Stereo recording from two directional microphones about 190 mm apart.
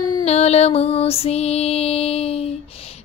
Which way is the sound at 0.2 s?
35° left (ahead or behind).